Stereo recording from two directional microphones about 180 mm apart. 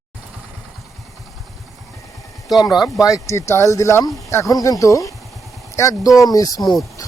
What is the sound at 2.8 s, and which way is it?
Speech, centre (ahead or behind).